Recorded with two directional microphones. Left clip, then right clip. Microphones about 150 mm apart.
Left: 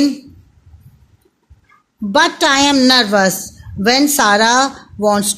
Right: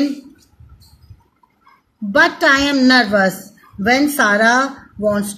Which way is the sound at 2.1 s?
50° left (ahead or behind).